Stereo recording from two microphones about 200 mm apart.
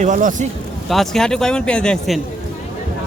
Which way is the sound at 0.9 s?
Centre (ahead or behind).